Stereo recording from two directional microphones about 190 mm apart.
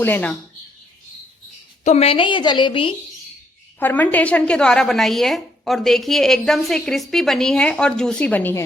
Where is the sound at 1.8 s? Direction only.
30° left (ahead or behind).